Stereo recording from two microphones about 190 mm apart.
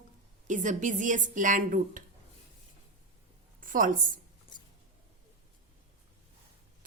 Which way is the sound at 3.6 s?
45° right (ahead or behind).